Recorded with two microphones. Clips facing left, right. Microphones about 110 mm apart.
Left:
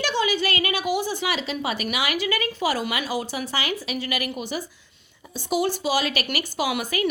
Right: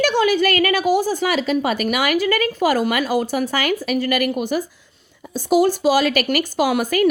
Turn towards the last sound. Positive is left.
turn(degrees=-45)  # may be behind; listen again after turning